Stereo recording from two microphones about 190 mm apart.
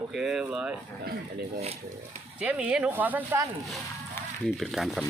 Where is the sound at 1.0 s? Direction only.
55° right (ahead or behind).